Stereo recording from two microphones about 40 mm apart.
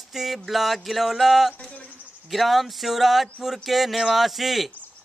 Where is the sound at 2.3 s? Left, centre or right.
Centre.